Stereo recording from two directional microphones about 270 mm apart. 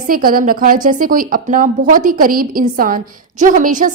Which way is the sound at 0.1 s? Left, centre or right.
Right.